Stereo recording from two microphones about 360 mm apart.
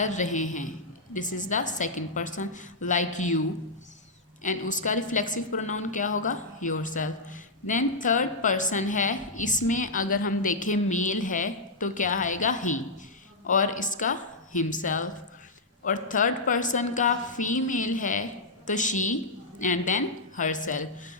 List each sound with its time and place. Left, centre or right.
0.0 s a woman's voice: centre
4.7 s a woman's voice: left